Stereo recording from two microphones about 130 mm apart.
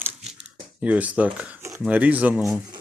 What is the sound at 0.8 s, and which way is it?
Speech, 10° right (ahead or behind).